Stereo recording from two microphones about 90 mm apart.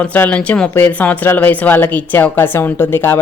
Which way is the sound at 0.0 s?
15° left (ahead or behind).